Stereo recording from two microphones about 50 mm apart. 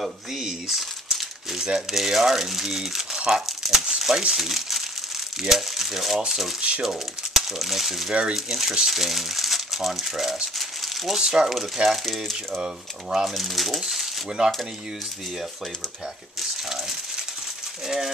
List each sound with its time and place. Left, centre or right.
0.0 s crumpling: centre
1.6 s speech: centre
8.1 s speech: right
8.5 s speech: centre
12.5 s speech: centre
13.2 s speech: centre
16.3 s a sound: centre
17.8 s speech: centre